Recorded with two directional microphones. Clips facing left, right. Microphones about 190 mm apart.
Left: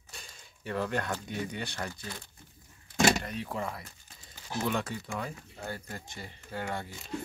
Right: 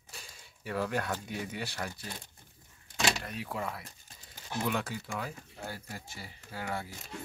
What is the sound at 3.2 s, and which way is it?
Speech, centre (ahead or behind).